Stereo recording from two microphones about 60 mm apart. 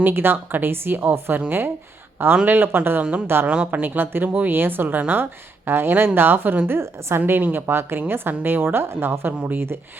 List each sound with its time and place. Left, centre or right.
0.0 s speech: right
3.0 s speech: centre